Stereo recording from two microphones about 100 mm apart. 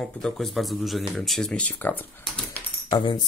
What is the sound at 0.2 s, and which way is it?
Speech, centre (ahead or behind).